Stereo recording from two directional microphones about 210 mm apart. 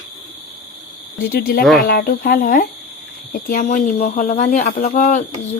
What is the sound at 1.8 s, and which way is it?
Speech, 45° left (ahead or behind).